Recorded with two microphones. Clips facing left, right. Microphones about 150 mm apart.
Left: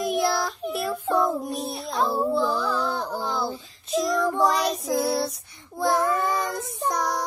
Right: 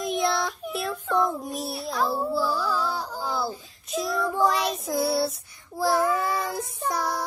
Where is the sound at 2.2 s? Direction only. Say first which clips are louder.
Left 2 dB; 5° right (ahead or behind).